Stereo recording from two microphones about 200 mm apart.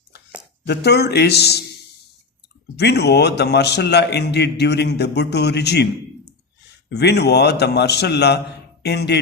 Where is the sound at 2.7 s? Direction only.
55° left (ahead or behind).